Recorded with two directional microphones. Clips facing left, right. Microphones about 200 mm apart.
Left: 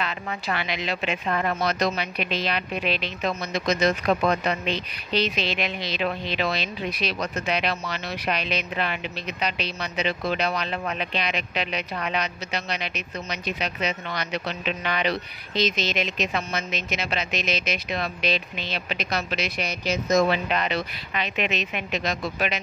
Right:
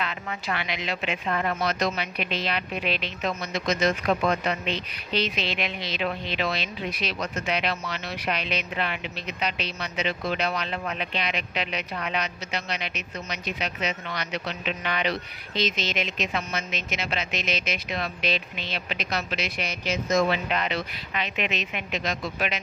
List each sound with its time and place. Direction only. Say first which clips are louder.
0.0 s speech: left 2 dB; 35° left (ahead or behind)